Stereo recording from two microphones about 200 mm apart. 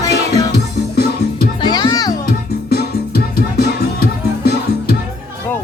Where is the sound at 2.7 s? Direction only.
50° left (ahead or behind).